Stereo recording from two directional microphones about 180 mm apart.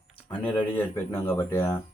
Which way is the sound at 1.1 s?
15° left (ahead or behind).